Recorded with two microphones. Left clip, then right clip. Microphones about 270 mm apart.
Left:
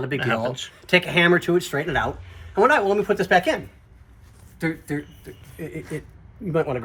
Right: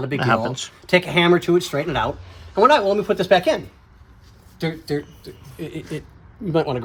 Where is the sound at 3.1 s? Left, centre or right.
Right.